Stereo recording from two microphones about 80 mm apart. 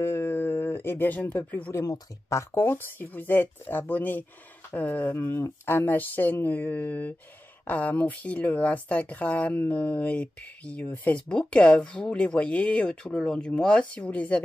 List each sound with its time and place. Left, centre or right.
0.0 s a sound: left
1.7 s speech: left
2.5 s speech: left